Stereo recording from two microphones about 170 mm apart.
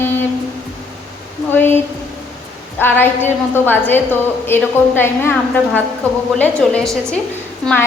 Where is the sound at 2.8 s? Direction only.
10° left (ahead or behind).